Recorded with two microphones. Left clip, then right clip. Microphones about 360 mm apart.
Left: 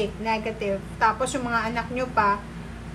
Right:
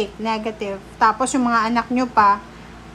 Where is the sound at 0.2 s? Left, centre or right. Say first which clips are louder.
Right 3 dB; centre.